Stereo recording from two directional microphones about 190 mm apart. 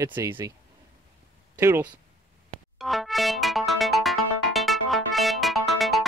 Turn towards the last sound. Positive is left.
turn(degrees=0)  # may be behind; listen again after turning